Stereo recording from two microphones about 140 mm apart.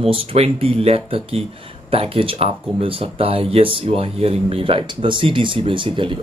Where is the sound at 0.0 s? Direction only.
40° right (ahead or behind).